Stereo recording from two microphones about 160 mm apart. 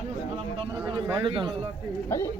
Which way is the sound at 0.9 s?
20° right (ahead or behind).